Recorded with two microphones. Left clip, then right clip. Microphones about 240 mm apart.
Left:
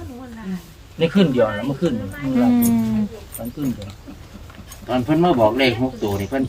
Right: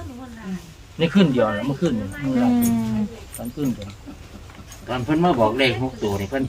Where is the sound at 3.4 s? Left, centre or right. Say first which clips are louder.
Left 2 dB; centre.